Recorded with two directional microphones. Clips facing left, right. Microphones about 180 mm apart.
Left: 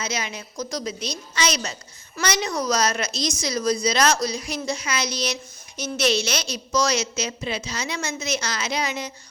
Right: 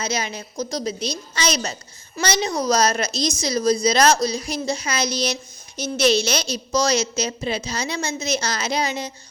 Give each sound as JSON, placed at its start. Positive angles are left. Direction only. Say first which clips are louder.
{"t": 0.0, "sound": "a woman's voice", "louder": "right 3 dB", "side_deg": -35}